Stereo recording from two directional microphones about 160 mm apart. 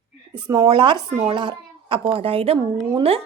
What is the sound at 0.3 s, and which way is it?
Speech, 25° right (ahead or behind).